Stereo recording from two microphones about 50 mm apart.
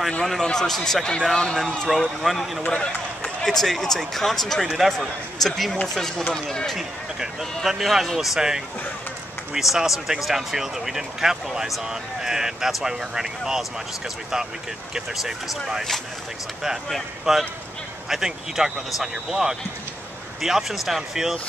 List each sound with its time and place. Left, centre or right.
0.3 s speech: centre
1.9 s speech: centre
2.7 s speech: centre
3.4 s speech: centre
6.8 s speech: centre
15.0 s speech: centre
17.3 s speech: centre